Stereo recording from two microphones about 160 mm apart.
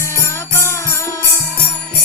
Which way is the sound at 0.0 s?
20° left (ahead or behind).